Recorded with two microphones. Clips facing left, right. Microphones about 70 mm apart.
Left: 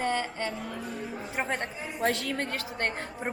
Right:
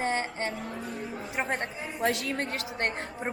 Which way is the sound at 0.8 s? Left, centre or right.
Centre.